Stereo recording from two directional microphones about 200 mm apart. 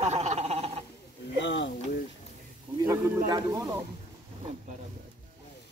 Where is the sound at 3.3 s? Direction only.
20° right (ahead or behind).